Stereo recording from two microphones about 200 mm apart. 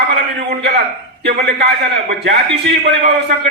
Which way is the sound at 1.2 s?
55° right (ahead or behind).